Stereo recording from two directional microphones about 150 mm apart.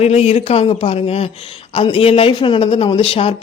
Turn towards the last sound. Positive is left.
turn(degrees=40)  # may be behind; listen again after turning